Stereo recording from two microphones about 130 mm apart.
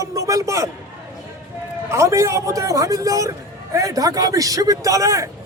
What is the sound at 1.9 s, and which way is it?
Speech, 20° right (ahead or behind).